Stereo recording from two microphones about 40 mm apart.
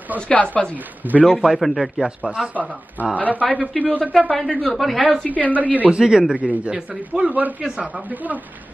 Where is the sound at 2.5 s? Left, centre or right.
Right.